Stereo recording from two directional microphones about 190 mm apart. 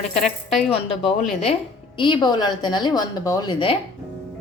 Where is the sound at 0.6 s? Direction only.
30° left (ahead or behind).